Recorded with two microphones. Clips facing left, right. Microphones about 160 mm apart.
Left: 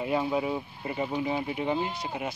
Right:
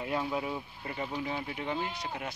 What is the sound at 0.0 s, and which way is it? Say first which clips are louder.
Speech: left 5 dB; 15° left (ahead or behind).